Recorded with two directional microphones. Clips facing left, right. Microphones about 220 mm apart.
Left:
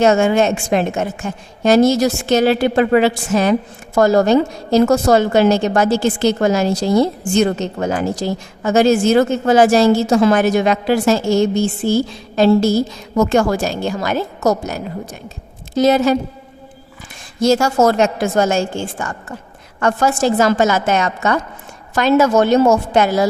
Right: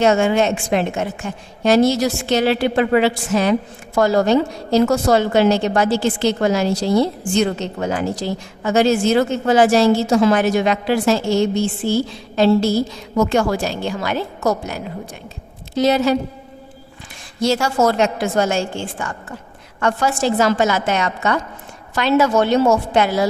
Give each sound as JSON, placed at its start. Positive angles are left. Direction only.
{"t": 0.0, "sound": "a woman's voice", "side_deg": 45}
{"t": 17.4, "sound": "a woman's voice", "side_deg": 45}